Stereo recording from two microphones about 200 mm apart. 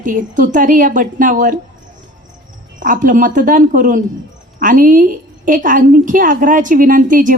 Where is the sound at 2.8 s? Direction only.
40° right (ahead or behind).